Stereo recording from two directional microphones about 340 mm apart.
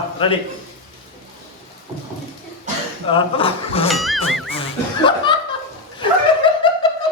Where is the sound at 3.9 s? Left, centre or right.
Centre.